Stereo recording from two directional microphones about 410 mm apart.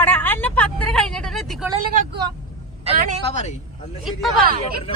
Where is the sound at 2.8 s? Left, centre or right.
Centre.